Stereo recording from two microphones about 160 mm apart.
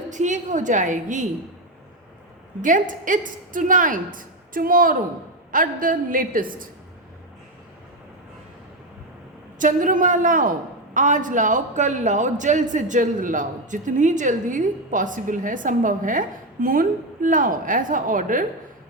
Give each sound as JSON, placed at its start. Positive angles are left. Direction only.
{"t": 0.1, "sound": "a woman's voice", "side_deg": -50}
{"t": 2.6, "sound": "a man's voice", "side_deg": -55}
{"t": 9.6, "sound": "a man's voice", "side_deg": -55}